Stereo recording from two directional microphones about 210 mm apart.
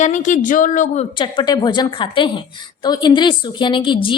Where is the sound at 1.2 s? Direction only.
20° left (ahead or behind).